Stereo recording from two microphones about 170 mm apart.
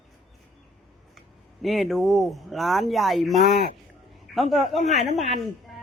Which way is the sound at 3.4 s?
50° right (ahead or behind).